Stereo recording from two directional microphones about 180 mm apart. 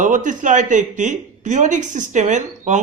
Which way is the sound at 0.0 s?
45° right (ahead or behind).